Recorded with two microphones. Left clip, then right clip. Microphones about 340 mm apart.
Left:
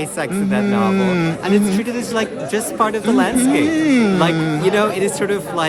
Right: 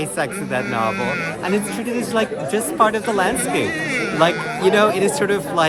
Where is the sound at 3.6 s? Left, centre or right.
Centre.